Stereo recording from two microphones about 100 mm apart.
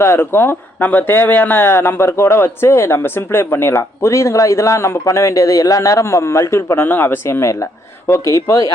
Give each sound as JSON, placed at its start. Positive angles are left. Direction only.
{"t": 0.0, "sound": "speech", "side_deg": 25}